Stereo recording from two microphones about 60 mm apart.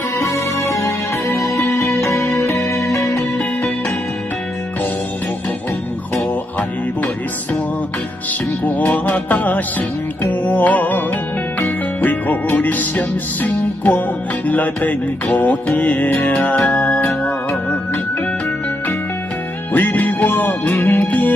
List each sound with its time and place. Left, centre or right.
0.2 s music: left
8.6 s music: left
19.7 s music: left